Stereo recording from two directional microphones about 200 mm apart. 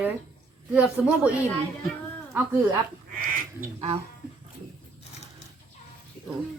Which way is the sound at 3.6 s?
35° right (ahead or behind).